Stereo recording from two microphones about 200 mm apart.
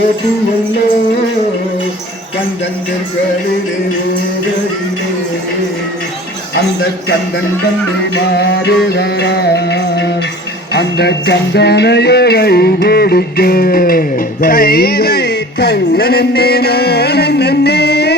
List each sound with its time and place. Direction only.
8.1 s music: 55° left (ahead or behind)